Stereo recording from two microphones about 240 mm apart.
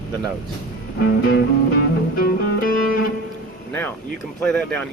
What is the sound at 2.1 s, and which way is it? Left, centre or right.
Music, left.